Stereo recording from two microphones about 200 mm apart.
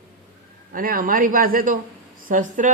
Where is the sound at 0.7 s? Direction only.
45° right (ahead or behind).